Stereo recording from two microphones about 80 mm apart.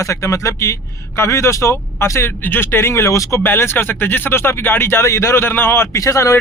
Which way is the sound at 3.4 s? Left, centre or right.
Left.